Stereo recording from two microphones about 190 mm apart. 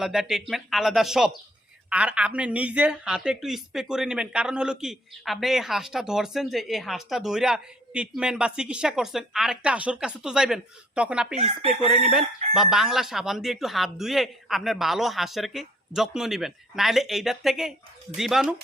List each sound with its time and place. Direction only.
0.0 s speech: centre (ahead or behind)
11.3 s speech: 30° right (ahead or behind)
11.9 s speech: 5° right (ahead or behind)